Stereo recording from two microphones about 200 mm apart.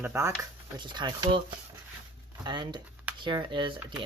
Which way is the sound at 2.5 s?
20° right (ahead or behind).